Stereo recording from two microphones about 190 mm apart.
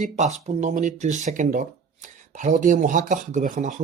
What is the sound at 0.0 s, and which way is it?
Speech, 40° right (ahead or behind).